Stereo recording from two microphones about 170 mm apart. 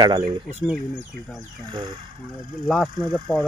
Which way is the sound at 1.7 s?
30° right (ahead or behind).